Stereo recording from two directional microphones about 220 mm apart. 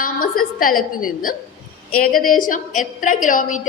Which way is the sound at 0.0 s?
40° left (ahead or behind).